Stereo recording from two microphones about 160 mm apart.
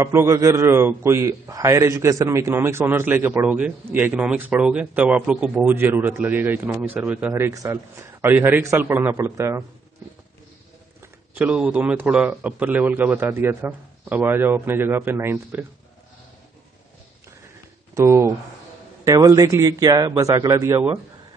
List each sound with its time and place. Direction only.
0.0 s a man's voice: 15° right (ahead or behind)
11.0 s a man's voice: 10° right (ahead or behind)
17.9 s a man's voice: 20° right (ahead or behind)